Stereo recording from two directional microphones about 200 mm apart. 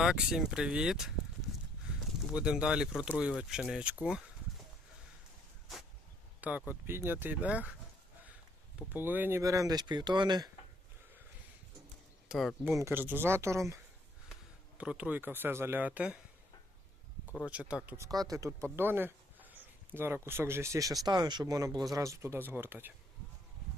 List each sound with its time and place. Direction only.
0.0 s speech: 5° right (ahead or behind)
6.4 s speech: 5° right (ahead or behind)
8.9 s speech: 10° right (ahead or behind)
12.3 s speech: centre (ahead or behind)
12.8 s speech: 10° right (ahead or behind)
17.4 s speech: 5° right (ahead or behind)